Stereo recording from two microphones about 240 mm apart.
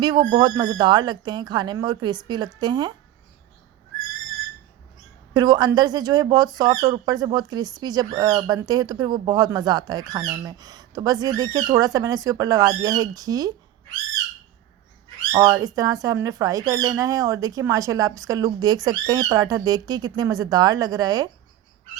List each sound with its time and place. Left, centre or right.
0.0 s speech: centre
5.3 s speech: centre
15.3 s speech: centre